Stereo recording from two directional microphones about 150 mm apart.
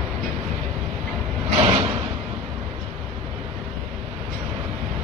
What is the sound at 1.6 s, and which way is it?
Slam, 35° right (ahead or behind).